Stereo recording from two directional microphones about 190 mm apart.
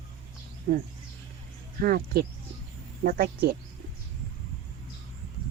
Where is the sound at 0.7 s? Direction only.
50° right (ahead or behind).